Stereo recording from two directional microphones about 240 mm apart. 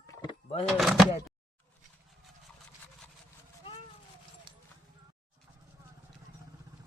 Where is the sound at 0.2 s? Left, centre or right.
Centre.